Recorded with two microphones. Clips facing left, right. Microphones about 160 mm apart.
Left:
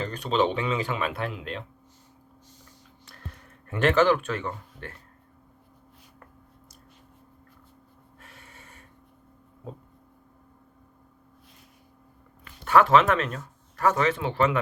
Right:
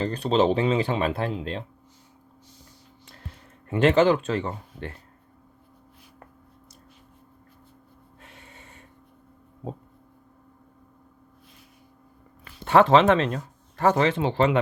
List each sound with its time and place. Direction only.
0.0 s speech: 35° right (ahead or behind)
3.7 s speech: 25° right (ahead or behind)
8.2 s snort: 20° right (ahead or behind)
12.6 s speech: 25° right (ahead or behind)